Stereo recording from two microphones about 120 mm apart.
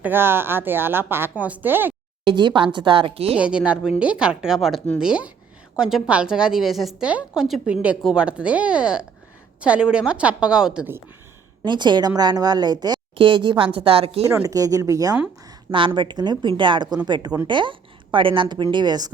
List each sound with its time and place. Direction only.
0.0 s a woman's voice: 20° right (ahead or behind)
2.2 s a woman's voice: 40° right (ahead or behind)
3.3 s a woman's voice: 10° right (ahead or behind)
11.6 s a woman's voice: 40° right (ahead or behind)
14.3 s a woman's voice: 30° right (ahead or behind)